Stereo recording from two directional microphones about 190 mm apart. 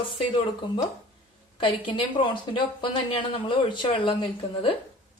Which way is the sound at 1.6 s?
25° left (ahead or behind).